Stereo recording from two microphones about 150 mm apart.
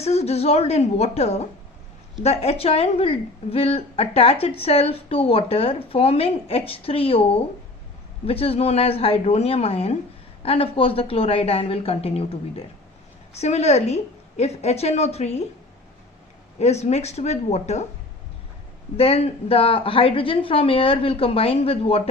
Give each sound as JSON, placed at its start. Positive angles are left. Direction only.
{"t": 0.0, "sound": "a woman's voice", "side_deg": 45}
{"t": 16.6, "sound": "a woman's voice", "side_deg": 45}
{"t": 18.9, "sound": "a woman's voice", "side_deg": 40}